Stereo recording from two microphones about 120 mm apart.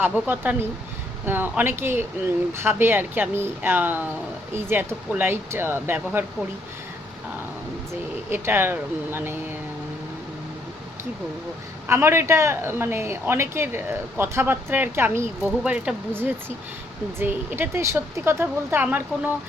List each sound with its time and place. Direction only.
0.0 s speech: 15° right (ahead or behind)
8.3 s speech: 20° right (ahead or behind)
11.9 s speech: 20° right (ahead or behind)